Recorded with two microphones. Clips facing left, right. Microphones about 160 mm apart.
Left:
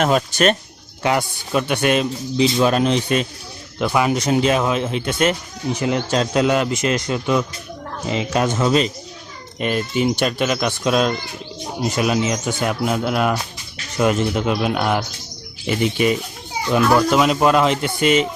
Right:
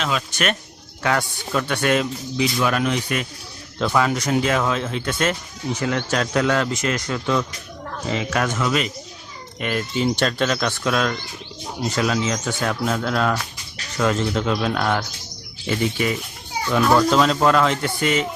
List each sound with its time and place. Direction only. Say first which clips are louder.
0.0 s speech: left 7 dB; 45° left (ahead or behind)
0.3 s speech: left 7 dB; 35° left (ahead or behind)
1.0 s a man's voice: left 2 dB; 20° left (ahead or behind)
3.8 s a man's voice: left 2 dB; 15° left (ahead or behind)